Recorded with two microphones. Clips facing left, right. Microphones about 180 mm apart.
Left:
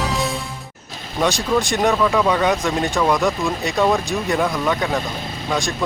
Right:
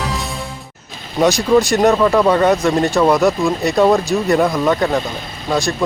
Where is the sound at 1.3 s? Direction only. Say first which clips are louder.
Right 8 dB; 40° right (ahead or behind).